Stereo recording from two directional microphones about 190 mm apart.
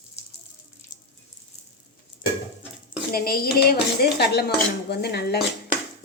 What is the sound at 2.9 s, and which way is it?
Speech, 50° left (ahead or behind).